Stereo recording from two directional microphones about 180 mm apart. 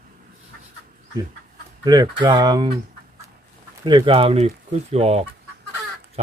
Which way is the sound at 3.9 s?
25° right (ahead or behind).